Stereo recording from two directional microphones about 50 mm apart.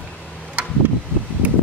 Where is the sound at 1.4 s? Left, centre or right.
Right.